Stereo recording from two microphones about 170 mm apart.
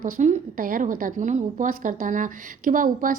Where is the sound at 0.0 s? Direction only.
45° right (ahead or behind).